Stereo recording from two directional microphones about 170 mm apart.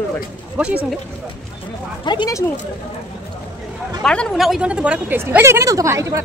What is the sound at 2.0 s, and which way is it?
Speech, 25° left (ahead or behind).